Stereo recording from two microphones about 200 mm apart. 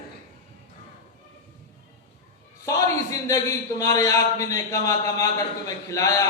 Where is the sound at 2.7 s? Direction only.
15° left (ahead or behind).